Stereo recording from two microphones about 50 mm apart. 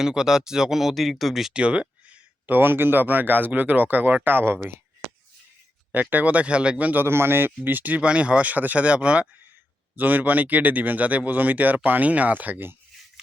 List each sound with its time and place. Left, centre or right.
0.0 s speech: centre
1.5 s speech: right
2.5 s speech: right
5.9 s speech: right
7.0 s speech: right
8.0 s speech: right
9.9 s speech: right